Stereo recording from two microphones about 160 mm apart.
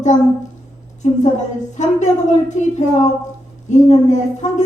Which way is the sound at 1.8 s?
45° left (ahead or behind).